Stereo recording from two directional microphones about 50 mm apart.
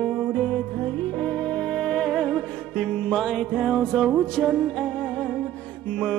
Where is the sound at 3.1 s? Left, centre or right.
Centre.